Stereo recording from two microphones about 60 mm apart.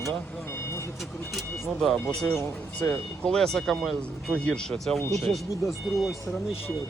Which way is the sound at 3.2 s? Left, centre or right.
Centre.